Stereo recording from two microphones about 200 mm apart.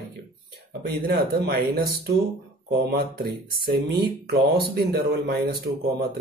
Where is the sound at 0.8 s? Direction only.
55° right (ahead or behind).